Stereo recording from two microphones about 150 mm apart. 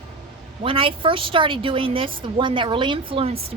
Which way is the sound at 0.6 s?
35° right (ahead or behind).